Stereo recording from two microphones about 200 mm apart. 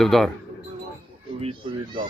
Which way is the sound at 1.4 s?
25° right (ahead or behind).